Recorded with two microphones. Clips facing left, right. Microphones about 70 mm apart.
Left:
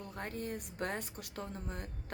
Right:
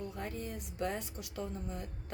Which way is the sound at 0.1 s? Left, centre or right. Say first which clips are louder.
Left 1 dB; left.